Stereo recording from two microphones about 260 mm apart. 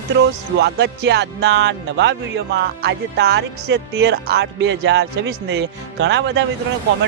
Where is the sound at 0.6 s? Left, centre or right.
Right.